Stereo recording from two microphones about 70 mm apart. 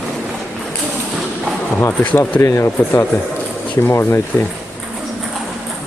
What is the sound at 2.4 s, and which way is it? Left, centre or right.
Speech, left.